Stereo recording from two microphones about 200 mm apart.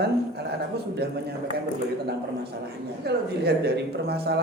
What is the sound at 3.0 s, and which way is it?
Speech, 55° right (ahead or behind).